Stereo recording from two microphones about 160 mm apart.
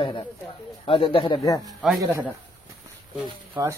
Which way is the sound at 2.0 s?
15° right (ahead or behind).